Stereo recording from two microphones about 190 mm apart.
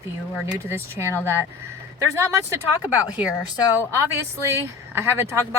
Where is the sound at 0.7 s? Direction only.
15° right (ahead or behind).